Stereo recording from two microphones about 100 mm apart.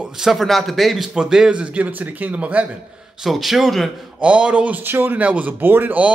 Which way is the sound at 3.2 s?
Centre (ahead or behind).